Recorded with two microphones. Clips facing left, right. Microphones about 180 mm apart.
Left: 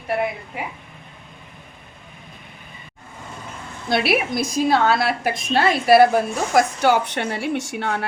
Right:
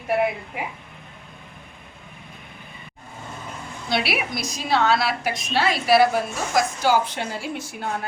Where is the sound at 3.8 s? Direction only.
50° left (ahead or behind).